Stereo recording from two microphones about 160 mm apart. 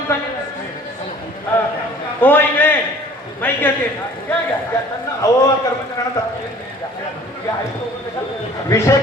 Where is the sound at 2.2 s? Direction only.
10° left (ahead or behind).